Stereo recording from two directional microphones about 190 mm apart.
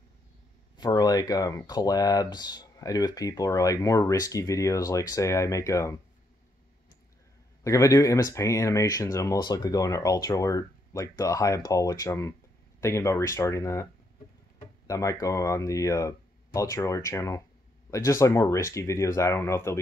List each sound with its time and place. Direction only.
0.7 s speech: 20° left (ahead or behind)
7.6 s speech: 15° left (ahead or behind)
14.9 s speech: 15° left (ahead or behind)